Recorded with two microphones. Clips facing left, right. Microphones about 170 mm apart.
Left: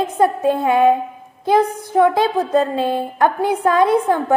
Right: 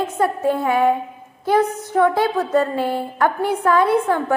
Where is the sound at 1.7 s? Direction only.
10° left (ahead or behind).